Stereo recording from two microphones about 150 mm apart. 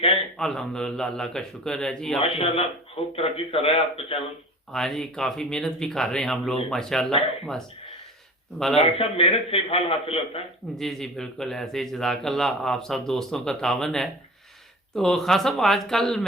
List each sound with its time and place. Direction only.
0.3 s a man's voice: 5° left (ahead or behind)
2.2 s a man's voice: 40° left (ahead or behind)
4.7 s a man's voice: 5° left (ahead or behind)
8.5 s a man's voice: centre (ahead or behind)
8.8 s a man's voice: 40° left (ahead or behind)
10.8 s a man's voice: centre (ahead or behind)